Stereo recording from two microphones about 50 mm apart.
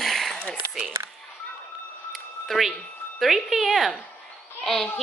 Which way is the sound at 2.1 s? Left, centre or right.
Centre.